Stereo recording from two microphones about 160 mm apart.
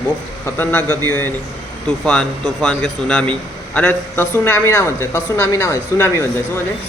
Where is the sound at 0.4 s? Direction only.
15° left (ahead or behind).